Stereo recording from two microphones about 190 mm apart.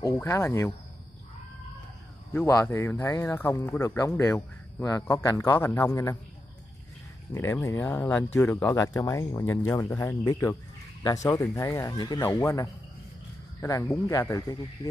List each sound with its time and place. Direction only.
0.0 s speech: 15° left (ahead or behind)
2.3 s speech: 15° left (ahead or behind)
7.3 s speech: 15° left (ahead or behind)